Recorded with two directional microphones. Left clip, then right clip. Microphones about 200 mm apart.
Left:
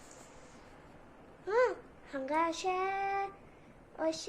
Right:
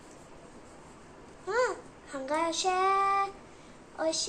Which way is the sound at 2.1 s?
45° left (ahead or behind).